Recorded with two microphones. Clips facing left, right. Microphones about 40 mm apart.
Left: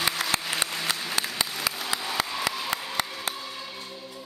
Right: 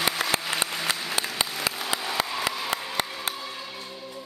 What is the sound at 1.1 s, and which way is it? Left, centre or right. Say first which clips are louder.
Applause: right 1 dB; centre.